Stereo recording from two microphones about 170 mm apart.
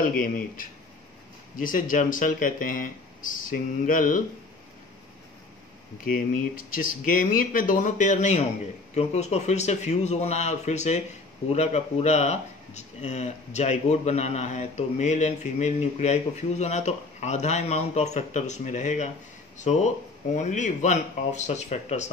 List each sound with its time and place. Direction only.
0.2 s speech: 50° left (ahead or behind)
6.1 s speech: 55° left (ahead or behind)